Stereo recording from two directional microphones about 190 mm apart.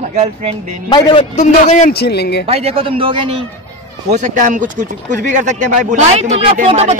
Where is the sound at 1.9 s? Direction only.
60° left (ahead or behind).